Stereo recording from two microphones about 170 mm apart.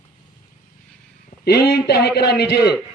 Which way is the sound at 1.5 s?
70° left (ahead or behind).